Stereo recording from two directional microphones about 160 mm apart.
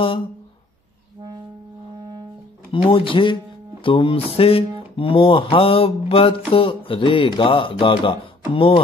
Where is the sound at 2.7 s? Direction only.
35° left (ahead or behind).